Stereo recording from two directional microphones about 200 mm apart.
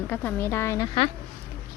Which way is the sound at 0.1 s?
10° left (ahead or behind).